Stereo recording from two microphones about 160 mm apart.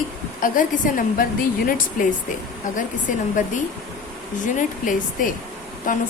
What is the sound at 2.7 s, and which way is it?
Speech, 55° left (ahead or behind).